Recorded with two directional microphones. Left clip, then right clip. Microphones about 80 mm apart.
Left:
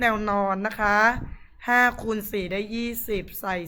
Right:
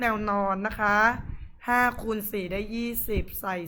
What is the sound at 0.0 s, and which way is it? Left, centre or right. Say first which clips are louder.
A woman's voice: left 3 dB; left.